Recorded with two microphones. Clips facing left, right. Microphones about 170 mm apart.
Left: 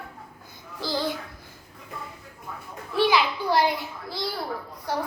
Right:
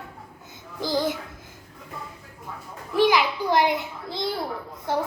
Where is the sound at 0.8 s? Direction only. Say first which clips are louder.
Right 3 dB; 15° right (ahead or behind).